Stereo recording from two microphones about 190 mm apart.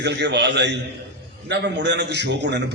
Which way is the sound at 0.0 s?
65° right (ahead or behind).